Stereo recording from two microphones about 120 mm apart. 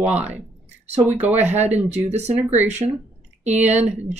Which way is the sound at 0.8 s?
65° right (ahead or behind).